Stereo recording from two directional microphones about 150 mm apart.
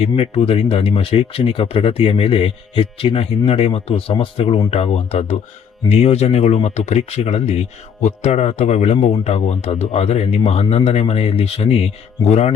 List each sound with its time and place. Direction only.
0.0 s speech: 40° left (ahead or behind)